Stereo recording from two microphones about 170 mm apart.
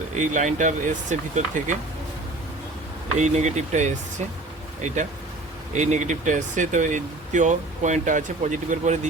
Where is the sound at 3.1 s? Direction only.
45° right (ahead or behind).